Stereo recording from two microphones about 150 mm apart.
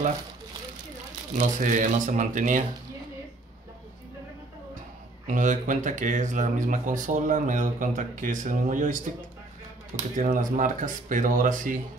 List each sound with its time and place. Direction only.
1.4 s speech: 55° right (ahead or behind)
5.2 s speech: 55° right (ahead or behind)
10.1 s speech: 60° right (ahead or behind)